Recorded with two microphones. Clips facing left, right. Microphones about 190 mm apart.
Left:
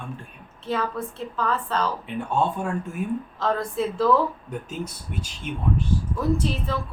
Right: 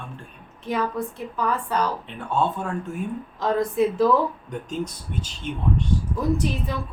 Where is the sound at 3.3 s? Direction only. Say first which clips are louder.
Right 5 dB; 15° right (ahead or behind).